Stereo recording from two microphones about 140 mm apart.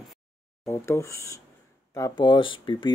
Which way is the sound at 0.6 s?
20° left (ahead or behind).